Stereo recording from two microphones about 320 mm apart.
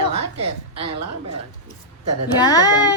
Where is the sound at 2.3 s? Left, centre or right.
Centre.